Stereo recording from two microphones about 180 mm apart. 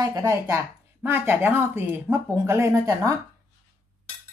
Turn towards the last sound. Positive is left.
turn(degrees=-15)  # may be behind; listen again after turning